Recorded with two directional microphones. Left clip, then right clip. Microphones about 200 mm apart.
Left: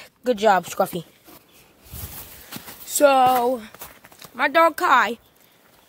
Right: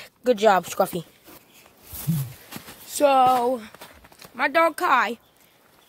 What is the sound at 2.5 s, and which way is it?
Speech, 10° left (ahead or behind).